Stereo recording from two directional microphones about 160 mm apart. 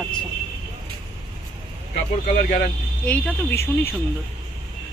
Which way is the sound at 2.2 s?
70° left (ahead or behind).